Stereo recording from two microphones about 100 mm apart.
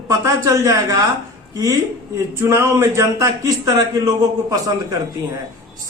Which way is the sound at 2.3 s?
25° right (ahead or behind).